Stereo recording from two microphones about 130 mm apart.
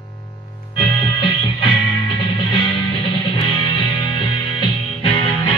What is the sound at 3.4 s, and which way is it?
Music, 40° left (ahead or behind).